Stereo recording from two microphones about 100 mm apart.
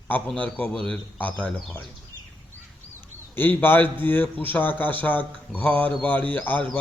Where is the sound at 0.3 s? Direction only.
15° left (ahead or behind).